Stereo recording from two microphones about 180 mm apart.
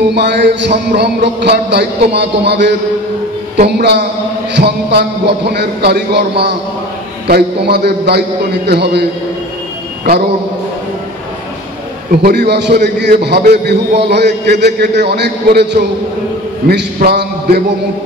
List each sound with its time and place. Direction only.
0.1 s a man's voice: 70° right (ahead or behind)
12.2 s a man's voice: 65° right (ahead or behind)